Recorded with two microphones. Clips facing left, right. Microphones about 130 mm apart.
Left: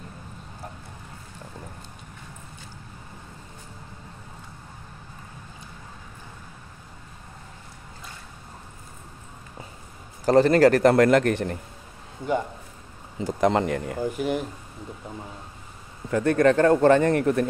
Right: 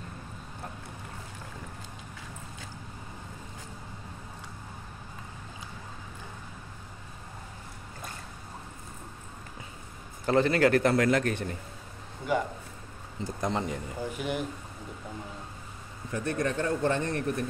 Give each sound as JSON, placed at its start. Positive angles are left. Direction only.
{"t": 10.2, "sound": "a man's voice", "side_deg": 40}
{"t": 13.3, "sound": "speech", "side_deg": 90}
{"t": 13.9, "sound": "speech", "side_deg": 40}
{"t": 16.1, "sound": "speech", "side_deg": 90}